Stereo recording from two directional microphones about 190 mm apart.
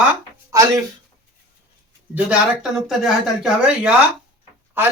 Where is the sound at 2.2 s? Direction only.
5° right (ahead or behind).